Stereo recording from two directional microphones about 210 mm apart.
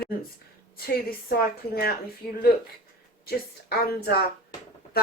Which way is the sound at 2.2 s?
5° left (ahead or behind).